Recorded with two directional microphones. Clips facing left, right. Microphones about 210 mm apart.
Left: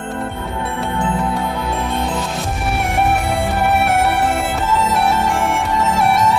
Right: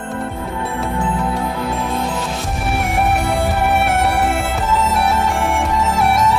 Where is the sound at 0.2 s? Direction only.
Centre (ahead or behind).